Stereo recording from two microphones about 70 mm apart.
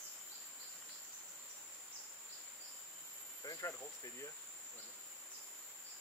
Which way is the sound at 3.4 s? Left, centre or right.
Left.